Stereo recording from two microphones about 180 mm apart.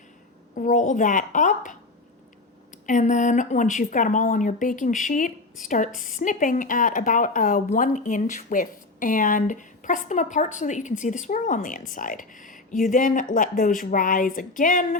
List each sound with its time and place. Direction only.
0.5 s speech: 45° left (ahead or behind)
2.8 s speech: 45° left (ahead or behind)